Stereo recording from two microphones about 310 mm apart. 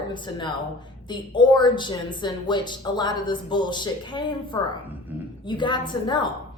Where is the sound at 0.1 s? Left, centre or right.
Centre.